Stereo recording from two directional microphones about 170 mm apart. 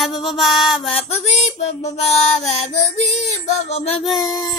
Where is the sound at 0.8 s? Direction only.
40° left (ahead or behind).